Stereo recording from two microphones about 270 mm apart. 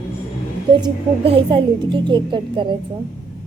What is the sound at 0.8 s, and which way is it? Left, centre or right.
A woman's voice, centre.